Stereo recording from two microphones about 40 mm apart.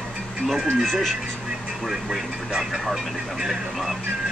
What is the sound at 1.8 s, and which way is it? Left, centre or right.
Speech, centre.